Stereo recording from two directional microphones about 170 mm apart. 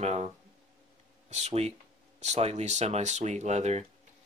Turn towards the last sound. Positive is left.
turn(degrees=-40)  # may be behind; listen again after turning